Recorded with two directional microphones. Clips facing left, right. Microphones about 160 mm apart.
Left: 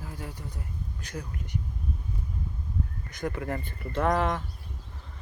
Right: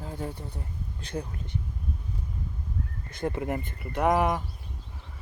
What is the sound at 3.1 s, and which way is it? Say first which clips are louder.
Speech: right 2 dB; 25° right (ahead or behind).